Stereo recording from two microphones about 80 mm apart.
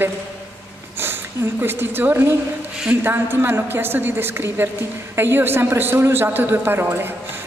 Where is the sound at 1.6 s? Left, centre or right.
Right.